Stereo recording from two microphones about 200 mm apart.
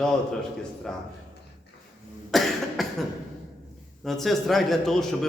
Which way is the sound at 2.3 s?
Centre (ahead or behind).